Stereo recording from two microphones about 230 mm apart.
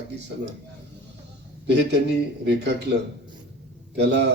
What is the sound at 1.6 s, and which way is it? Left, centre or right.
Speech, right.